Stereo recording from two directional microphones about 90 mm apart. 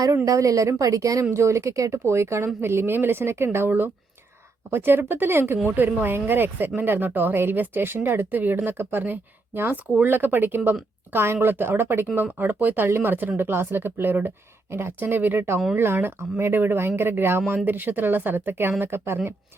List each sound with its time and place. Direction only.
0.3 s speech: 40° right (ahead or behind)